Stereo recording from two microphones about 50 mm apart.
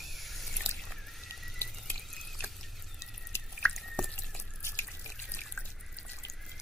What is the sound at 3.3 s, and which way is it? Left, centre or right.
Drip, left.